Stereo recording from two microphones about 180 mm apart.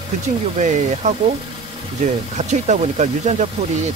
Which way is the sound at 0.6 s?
40° right (ahead or behind).